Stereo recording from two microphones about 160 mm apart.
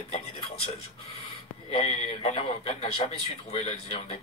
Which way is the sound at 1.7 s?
45° left (ahead or behind).